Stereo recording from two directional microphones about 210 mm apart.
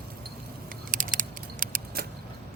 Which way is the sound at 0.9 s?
40° right (ahead or behind).